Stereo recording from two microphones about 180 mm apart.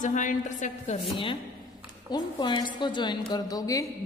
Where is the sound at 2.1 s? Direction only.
25° left (ahead or behind).